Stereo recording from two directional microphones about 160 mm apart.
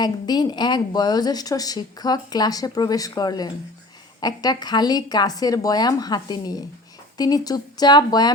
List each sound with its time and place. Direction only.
0.0 s a woman's voice: 25° left (ahead or behind)